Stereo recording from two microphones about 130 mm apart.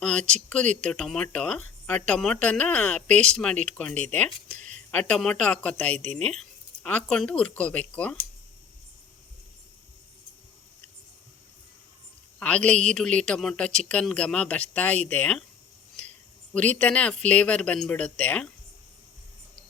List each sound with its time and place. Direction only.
0.0 s speech: 10° left (ahead or behind)
4.5 s a sound: 65° right (ahead or behind)
4.9 s speech: 10° left (ahead or behind)
12.4 s speech: 10° left (ahead or behind)
16.6 s speech: 10° left (ahead or behind)